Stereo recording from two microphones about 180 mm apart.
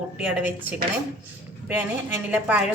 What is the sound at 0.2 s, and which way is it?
Speech, 10° right (ahead or behind).